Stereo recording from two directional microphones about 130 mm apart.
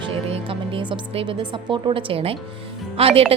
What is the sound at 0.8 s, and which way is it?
A woman's voice, 40° right (ahead or behind).